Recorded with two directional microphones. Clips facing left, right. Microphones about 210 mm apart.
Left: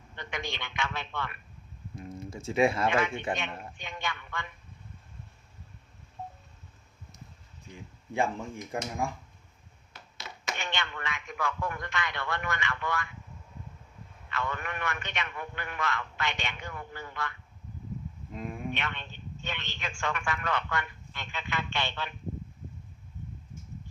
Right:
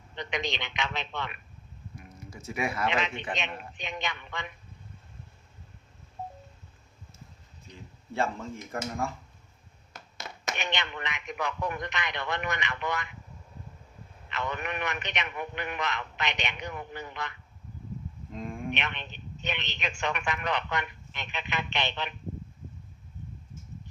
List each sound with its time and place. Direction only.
0.2 s a man's voice: 20° right (ahead or behind)
2.0 s speech: 25° left (ahead or behind)
2.9 s a man's voice: 20° right (ahead or behind)
8.1 s speech: 15° left (ahead or behind)
9.9 s a sound: 45° right (ahead or behind)
10.6 s a man's voice: 20° right (ahead or behind)
14.3 s a man's voice: 20° right (ahead or behind)
18.3 s a sound: 5° left (ahead or behind)
18.7 s a man's voice: 20° right (ahead or behind)